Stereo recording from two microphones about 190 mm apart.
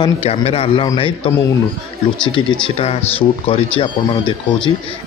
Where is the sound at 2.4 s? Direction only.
25° left (ahead or behind).